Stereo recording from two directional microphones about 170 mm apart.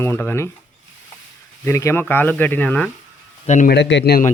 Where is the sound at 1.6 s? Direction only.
15° left (ahead or behind).